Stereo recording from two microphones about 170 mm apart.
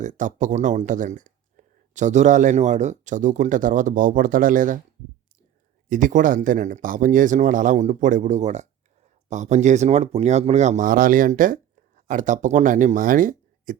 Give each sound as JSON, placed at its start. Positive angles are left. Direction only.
{"t": 0.0, "sound": "speech", "side_deg": -45}
{"t": 5.9, "sound": "speech", "side_deg": -50}